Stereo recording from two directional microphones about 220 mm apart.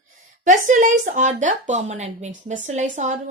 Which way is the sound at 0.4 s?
35° right (ahead or behind).